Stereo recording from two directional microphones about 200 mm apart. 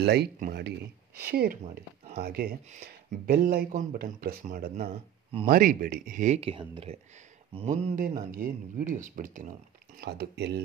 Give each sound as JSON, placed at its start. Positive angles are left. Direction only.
{"t": 0.0, "sound": "speech", "side_deg": -55}
{"t": 9.9, "sound": "speech", "side_deg": -55}